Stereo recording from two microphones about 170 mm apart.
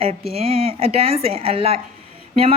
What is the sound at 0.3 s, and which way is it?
Speech, 35° right (ahead or behind).